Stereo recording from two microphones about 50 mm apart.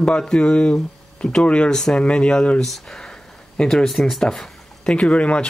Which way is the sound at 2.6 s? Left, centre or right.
Centre.